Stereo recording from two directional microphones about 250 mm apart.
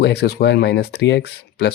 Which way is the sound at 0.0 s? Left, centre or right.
Left.